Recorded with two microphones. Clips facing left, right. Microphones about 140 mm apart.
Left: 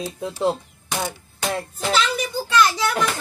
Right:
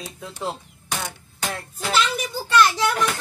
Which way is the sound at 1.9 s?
Centre (ahead or behind).